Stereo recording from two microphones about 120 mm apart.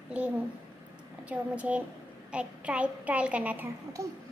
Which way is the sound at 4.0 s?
25° right (ahead or behind).